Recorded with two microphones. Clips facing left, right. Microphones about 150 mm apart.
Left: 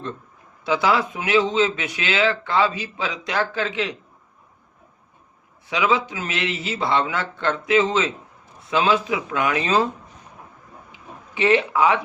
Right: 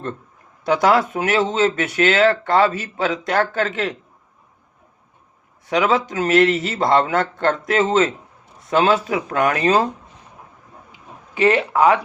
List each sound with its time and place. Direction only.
0.7 s speech: 50° right (ahead or behind)
5.6 s speech: 45° right (ahead or behind)
11.3 s speech: 40° right (ahead or behind)